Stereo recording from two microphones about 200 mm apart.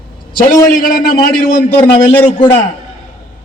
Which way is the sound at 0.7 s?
45° left (ahead or behind).